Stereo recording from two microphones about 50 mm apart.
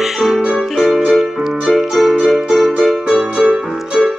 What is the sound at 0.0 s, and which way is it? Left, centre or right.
Music, centre.